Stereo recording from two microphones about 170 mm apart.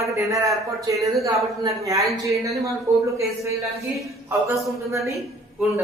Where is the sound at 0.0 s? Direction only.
20° right (ahead or behind).